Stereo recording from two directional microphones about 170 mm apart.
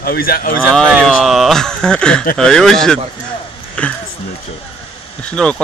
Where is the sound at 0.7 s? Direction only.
Centre (ahead or behind).